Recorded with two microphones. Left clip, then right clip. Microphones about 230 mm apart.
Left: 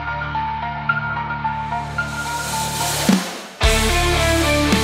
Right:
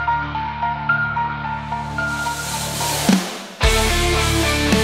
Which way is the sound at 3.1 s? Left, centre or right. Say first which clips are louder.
Right 1 dB; centre.